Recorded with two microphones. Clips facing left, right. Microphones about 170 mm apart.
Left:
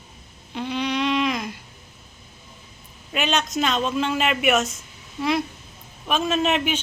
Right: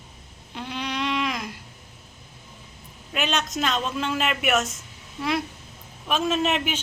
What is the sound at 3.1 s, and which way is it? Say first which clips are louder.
Speech: left 3 dB; centre (ahead or behind).